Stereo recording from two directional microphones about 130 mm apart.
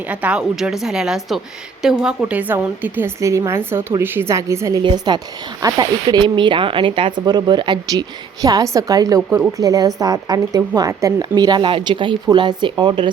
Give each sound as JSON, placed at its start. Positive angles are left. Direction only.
{"t": 0.1, "sound": "a woman's voice", "side_deg": -10}
{"t": 4.8, "sound": "speech", "side_deg": -35}